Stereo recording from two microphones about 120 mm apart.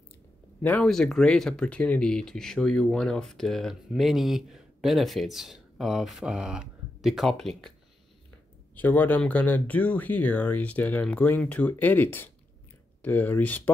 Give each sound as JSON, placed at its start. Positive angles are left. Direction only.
{"t": 0.6, "sound": "speech", "side_deg": 10}
{"t": 8.7, "sound": "speech", "side_deg": 15}